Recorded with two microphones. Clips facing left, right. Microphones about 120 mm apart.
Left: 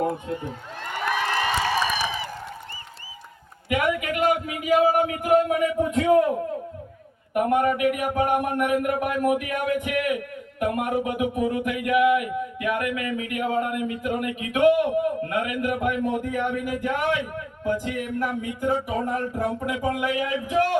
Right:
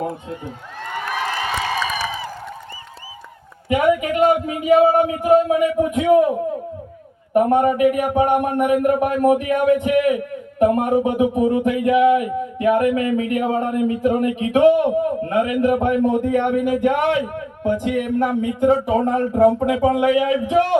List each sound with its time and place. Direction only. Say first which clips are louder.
3.7 s a man's voice: right 7 dB; 20° right (ahead or behind)
7.3 s a man's voice: right 6 dB; 30° right (ahead or behind)